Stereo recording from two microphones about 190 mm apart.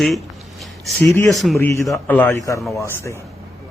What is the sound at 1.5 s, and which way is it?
Speech, 10° left (ahead or behind).